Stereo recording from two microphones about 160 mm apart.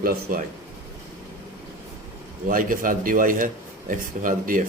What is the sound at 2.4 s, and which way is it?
Speech, 60° right (ahead or behind).